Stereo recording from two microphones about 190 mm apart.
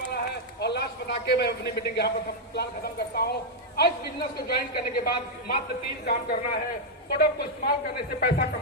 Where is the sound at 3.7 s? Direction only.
55° left (ahead or behind).